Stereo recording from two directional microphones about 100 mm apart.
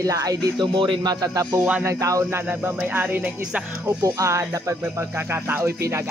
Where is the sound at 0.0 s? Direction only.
35° right (ahead or behind).